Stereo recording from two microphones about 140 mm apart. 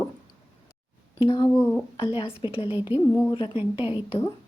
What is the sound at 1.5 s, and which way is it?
Speech, 15° left (ahead or behind).